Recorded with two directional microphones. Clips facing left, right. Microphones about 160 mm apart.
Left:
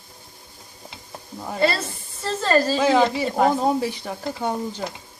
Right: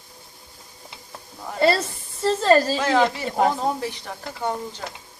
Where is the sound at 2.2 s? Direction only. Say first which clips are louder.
Right 3 dB; 30° right (ahead or behind).